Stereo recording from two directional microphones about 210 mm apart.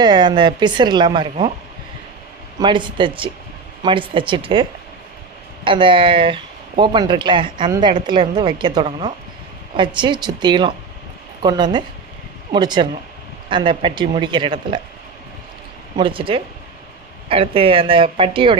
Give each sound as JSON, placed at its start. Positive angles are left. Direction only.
{"t": 0.0, "sound": "speech", "side_deg": -20}
{"t": 2.6, "sound": "speech", "side_deg": -20}
{"t": 5.6, "sound": "speech", "side_deg": -25}
{"t": 16.0, "sound": "speech", "side_deg": -25}